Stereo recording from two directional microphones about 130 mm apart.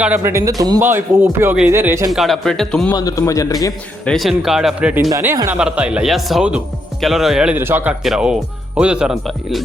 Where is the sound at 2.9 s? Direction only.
30° left (ahead or behind).